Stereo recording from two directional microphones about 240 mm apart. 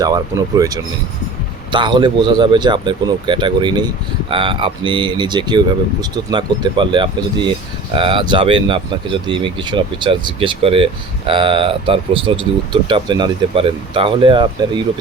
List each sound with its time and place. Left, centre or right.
0.0 s speech: centre